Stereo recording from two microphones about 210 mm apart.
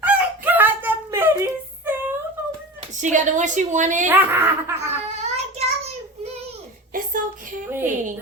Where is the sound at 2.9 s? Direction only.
35° right (ahead or behind).